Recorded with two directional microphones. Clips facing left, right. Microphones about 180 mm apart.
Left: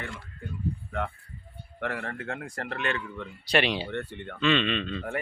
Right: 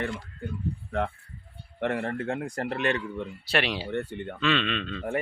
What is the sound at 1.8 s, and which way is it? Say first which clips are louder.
Speech: right 5 dB; 25° right (ahead or behind).